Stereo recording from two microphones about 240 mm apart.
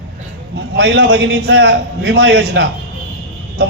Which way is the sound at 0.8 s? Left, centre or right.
Right.